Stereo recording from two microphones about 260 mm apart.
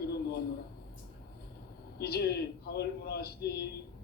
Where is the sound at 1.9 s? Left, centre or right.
Left.